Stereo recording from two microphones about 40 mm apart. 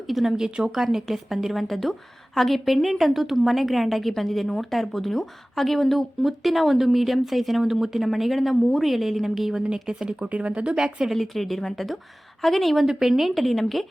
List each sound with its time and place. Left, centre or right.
0.1 s speech: centre
0.3 s speech: centre
9.6 s speech: centre
10.2 s speech: right
11.0 s speech: centre